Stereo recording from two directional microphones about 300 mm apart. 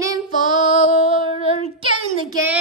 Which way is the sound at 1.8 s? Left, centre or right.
Centre.